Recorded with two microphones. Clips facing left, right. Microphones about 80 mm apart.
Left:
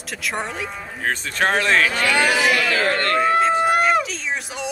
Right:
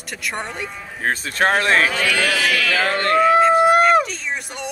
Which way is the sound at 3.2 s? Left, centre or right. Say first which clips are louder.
Right 5 dB; centre.